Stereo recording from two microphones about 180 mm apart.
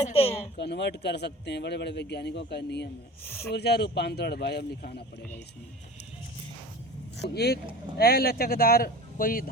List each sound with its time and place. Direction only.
0.0 s speech: 35° left (ahead or behind)
0.5 s speech: 70° left (ahead or behind)
3.2 s speech: 10° left (ahead or behind)
3.5 s speech: 65° left (ahead or behind)
7.3 s speech: 60° left (ahead or behind)